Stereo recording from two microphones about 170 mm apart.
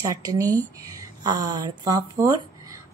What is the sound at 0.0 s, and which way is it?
Speech, 20° right (ahead or behind).